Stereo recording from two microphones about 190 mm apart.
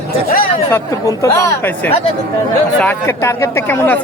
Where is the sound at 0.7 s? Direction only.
15° left (ahead or behind).